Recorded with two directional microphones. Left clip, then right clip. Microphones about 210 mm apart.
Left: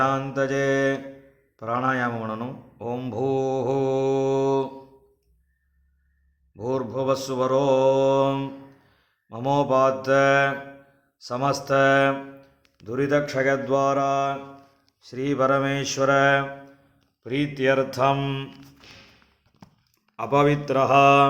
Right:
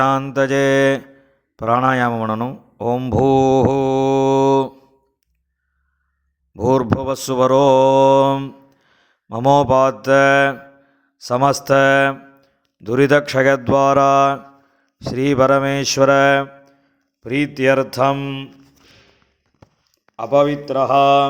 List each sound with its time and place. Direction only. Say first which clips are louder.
0.0 s mantra: right 7 dB; 40° right (ahead or behind)
6.6 s mantra: right 9 dB; 40° right (ahead or behind)
11.2 s speech: right 9 dB; 40° right (ahead or behind)
14.9 s mantra: right 9 dB; 40° right (ahead or behind)
20.1 s speech: right 5 dB; 10° right (ahead or behind)